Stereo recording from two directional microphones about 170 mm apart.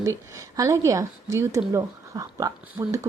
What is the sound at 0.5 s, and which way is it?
Speech, 20° right (ahead or behind).